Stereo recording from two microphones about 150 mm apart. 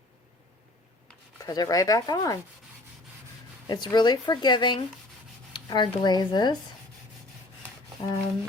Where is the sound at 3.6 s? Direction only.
30° left (ahead or behind).